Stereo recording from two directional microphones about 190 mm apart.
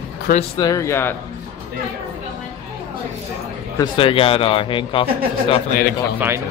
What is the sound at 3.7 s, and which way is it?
Speech, 25° left (ahead or behind).